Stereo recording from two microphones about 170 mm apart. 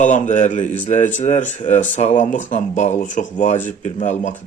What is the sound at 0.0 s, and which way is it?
Speech, 45° left (ahead or behind).